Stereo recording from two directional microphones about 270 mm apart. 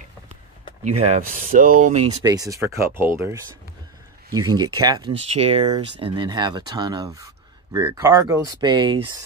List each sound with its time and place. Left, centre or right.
0.8 s speech: right
2.2 s speech: centre